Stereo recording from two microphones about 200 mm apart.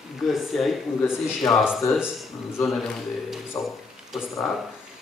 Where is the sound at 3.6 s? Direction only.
15° left (ahead or behind).